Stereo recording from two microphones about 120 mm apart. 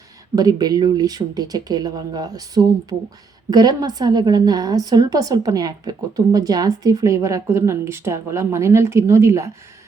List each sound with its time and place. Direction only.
0.3 s a woman's voice: 35° right (ahead or behind)
3.5 s a woman's voice: 35° right (ahead or behind)